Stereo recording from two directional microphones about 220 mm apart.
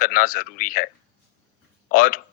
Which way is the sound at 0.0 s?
40° left (ahead or behind).